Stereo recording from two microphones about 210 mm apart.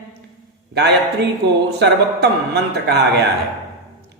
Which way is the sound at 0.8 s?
55° right (ahead or behind).